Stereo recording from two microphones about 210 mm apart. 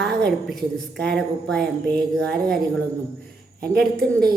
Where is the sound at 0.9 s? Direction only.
50° right (ahead or behind).